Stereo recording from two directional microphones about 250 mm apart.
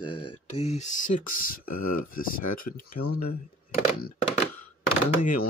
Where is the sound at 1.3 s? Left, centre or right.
Left.